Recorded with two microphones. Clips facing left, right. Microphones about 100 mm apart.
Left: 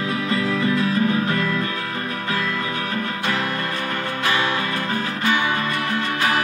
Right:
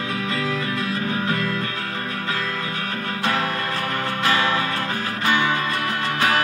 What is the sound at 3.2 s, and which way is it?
Music, 40° right (ahead or behind).